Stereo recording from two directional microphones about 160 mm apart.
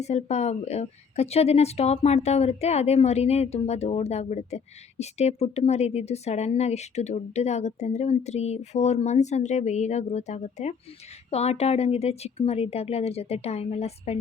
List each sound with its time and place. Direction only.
0.0 s a woman's voice: 45° left (ahead or behind)